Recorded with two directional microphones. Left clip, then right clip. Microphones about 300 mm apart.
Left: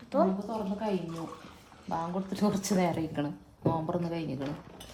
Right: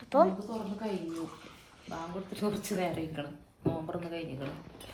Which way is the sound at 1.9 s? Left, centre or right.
Left.